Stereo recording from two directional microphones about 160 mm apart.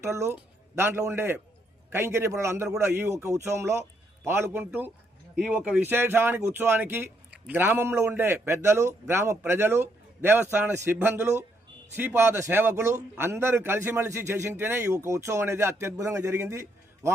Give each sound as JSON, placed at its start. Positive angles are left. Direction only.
{"t": 0.0, "sound": "a man's voice", "side_deg": -15}